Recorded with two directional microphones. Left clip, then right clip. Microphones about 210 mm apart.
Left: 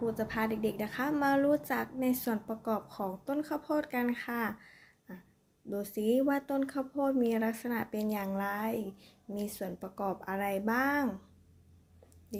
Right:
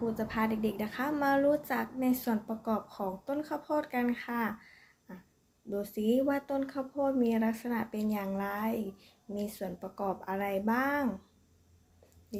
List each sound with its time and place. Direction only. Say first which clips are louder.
0.0 s speech: even; 15° left (ahead or behind)
12.3 s speech: even; 15° left (ahead or behind)